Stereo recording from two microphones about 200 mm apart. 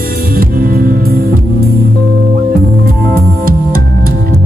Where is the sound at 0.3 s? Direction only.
45° right (ahead or behind).